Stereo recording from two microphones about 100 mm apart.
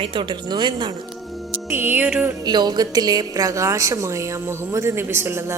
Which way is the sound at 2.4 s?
45° right (ahead or behind).